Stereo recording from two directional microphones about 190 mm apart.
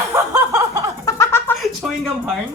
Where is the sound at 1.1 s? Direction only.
15° left (ahead or behind).